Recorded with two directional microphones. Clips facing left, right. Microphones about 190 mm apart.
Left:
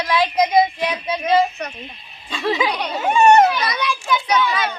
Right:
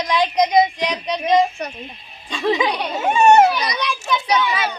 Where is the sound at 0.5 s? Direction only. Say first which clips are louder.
Even; 15° right (ahead or behind).